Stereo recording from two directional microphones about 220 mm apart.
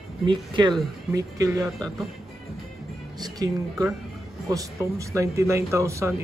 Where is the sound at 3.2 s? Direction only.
15° right (ahead or behind).